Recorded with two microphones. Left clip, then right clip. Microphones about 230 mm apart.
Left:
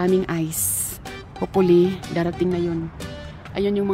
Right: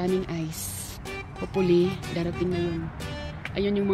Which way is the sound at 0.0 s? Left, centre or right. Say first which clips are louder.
Left 7 dB; left.